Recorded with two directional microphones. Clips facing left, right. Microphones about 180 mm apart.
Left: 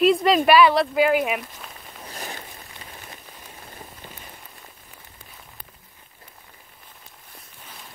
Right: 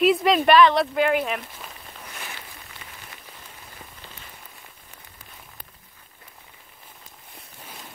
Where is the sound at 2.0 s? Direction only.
35° left (ahead or behind).